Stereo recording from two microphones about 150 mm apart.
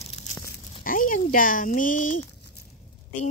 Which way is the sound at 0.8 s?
65° left (ahead or behind).